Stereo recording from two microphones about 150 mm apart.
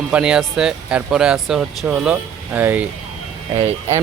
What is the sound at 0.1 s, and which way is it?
Speech, 5° right (ahead or behind).